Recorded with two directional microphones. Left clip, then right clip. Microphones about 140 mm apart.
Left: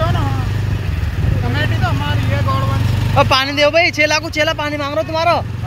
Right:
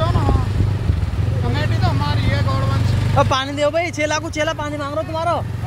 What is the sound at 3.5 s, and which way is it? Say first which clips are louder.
Speech: left 7 dB; 15° left (ahead or behind).